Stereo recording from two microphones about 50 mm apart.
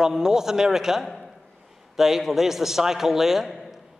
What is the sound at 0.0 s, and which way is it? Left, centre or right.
A man's voice, centre.